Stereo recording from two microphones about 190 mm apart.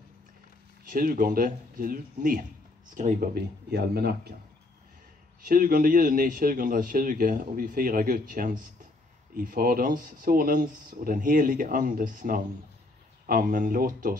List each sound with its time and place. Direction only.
0.8 s speech: 50° right (ahead or behind)
5.4 s speech: 50° right (ahead or behind)